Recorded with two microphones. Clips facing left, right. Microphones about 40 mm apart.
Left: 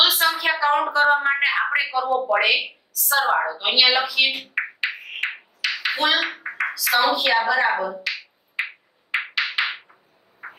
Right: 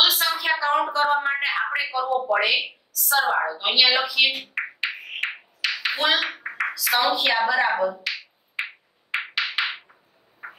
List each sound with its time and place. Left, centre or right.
0.0 s a sound: centre; by 1.8 s left
1.8 s a woman's voice: centre
4.4 s music: centre
5.6 s a sound: centre
6.5 s speech: centre
9.3 s music: centre